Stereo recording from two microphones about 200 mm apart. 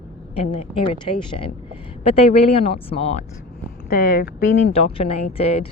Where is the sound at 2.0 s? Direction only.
30° left (ahead or behind).